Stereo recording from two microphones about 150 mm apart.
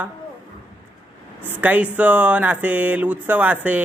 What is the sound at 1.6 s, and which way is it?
Speech, 10° right (ahead or behind).